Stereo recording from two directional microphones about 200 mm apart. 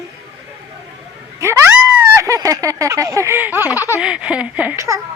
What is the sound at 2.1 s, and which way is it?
Fowl, 15° right (ahead or behind).